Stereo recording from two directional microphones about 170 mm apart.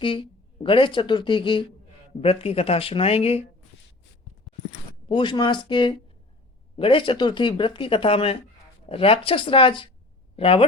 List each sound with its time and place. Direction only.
0.0 s speech: 30° left (ahead or behind)
5.0 s speech: 30° left (ahead or behind)